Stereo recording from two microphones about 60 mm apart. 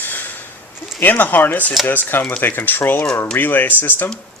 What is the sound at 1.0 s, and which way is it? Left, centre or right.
Speech, left.